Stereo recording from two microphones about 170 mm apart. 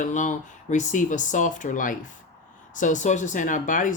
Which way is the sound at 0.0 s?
45° left (ahead or behind).